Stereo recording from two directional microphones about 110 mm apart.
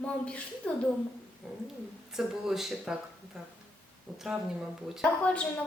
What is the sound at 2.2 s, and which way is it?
Speech, 5° right (ahead or behind).